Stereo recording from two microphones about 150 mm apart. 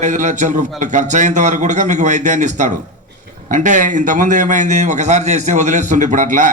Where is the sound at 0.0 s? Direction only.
55° right (ahead or behind).